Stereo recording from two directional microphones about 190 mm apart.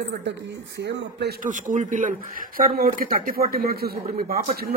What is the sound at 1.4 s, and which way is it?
Speech, 45° right (ahead or behind).